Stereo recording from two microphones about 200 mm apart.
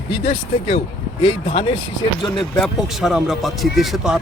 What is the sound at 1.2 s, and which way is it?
Speech, 30° left (ahead or behind).